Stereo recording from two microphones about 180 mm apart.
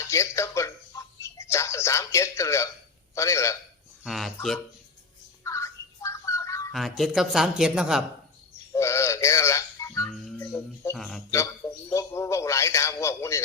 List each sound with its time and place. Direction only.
0.1 s a man's voice: 15° left (ahead or behind)
4.0 s speech: centre (ahead or behind)
5.4 s bird: 15° left (ahead or behind)
6.7 s speech: centre (ahead or behind)
8.7 s music: 15° left (ahead or behind)
10.1 s music: 5° left (ahead or behind)
10.9 s speech: centre (ahead or behind)
11.9 s a man's voice: 15° left (ahead or behind)